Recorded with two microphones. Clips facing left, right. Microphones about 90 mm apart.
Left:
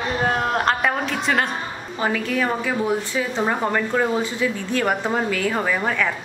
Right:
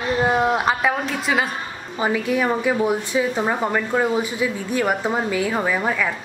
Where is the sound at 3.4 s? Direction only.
5° right (ahead or behind).